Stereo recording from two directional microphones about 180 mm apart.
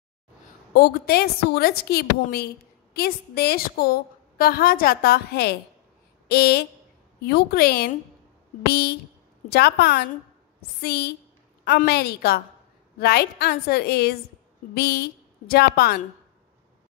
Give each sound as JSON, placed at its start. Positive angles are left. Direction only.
{"t": 0.7, "sound": "a woman's voice", "side_deg": 60}